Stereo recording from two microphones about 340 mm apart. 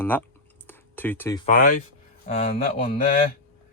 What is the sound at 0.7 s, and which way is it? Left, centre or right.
Computer keyboard, centre.